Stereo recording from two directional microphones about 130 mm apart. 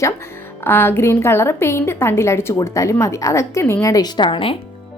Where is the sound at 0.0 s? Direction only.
20° left (ahead or behind); by 4.5 s 40° left (ahead or behind).